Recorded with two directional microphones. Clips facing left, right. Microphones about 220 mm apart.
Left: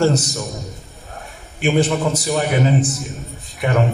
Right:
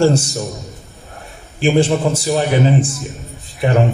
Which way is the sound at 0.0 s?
30° right (ahead or behind).